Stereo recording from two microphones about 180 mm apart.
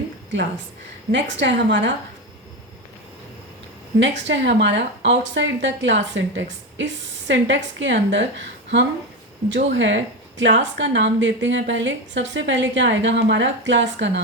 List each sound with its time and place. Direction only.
1.1 s speech: 80° right
4.0 s a woman's voice: 80° right